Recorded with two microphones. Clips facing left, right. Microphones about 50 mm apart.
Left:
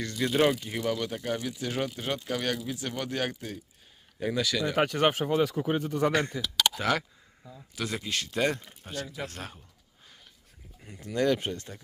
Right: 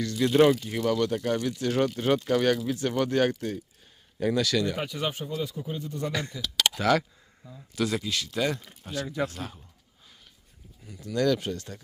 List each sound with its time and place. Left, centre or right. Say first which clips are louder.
0.2 s speech: right 5 dB; centre
4.7 s a man's voice: left 6 dB; left
6.1 s speech: left 4 dB; left
6.4 s speech: right 2 dB; centre
8.0 s speech: even; left
8.8 s speech: right 3 dB; centre
9.2 s speech: right 6 dB; left
10.8 s speech: right 1 dB; left
11.1 s speech: right 1 dB; left